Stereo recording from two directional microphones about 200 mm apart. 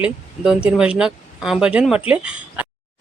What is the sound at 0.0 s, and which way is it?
Speech, 5° right (ahead or behind).